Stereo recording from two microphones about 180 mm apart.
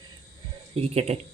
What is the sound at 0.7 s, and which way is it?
Speech, 35° right (ahead or behind).